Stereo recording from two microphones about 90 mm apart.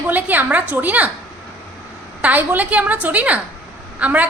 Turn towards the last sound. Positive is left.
turn(degrees=-15)  # may be behind; listen again after turning